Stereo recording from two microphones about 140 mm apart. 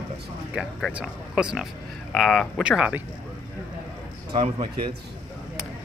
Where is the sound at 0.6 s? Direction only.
5° left (ahead or behind).